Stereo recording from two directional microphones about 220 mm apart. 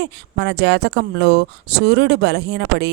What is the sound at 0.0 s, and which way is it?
Speech, 50° right (ahead or behind).